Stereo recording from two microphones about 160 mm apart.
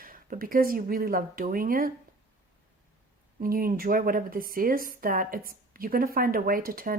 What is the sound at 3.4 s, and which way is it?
Speech, 65° right (ahead or behind).